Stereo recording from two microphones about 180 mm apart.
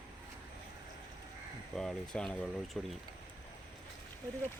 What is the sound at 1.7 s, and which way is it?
Speech, 5° left (ahead or behind).